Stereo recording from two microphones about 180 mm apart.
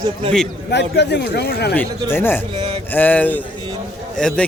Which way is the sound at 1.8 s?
10° left (ahead or behind).